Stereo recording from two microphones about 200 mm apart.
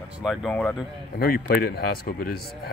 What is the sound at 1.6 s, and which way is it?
Speech, 50° left (ahead or behind).